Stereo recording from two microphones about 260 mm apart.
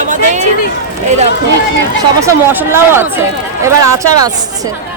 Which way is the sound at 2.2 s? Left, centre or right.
Centre.